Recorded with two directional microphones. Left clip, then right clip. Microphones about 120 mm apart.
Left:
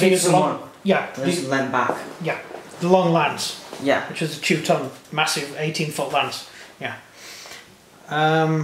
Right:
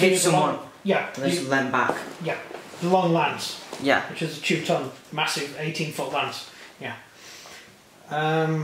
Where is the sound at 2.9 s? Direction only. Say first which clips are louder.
Left 4 dB; 45° left (ahead or behind).